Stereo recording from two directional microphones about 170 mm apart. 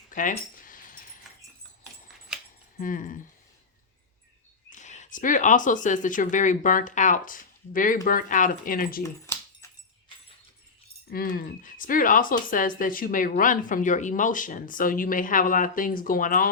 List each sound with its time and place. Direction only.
0.1 s keys jangling: 50° left (ahead or behind)
2.7 s speech: 50° left (ahead or behind)
4.7 s speech: 45° left (ahead or behind)
9.0 s a sound: 15° left (ahead or behind)
11.1 s speech: 60° left (ahead or behind)